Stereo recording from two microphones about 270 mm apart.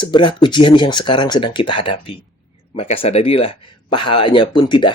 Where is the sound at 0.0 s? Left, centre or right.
Centre.